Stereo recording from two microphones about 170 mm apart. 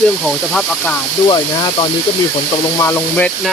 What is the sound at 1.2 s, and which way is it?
Speech, 25° left (ahead or behind).